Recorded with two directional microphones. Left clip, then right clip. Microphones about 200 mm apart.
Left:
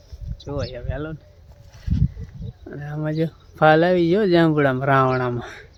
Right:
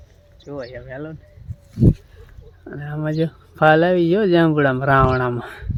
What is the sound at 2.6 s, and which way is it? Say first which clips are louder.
Speech: right 2 dB; 5° right (ahead or behind).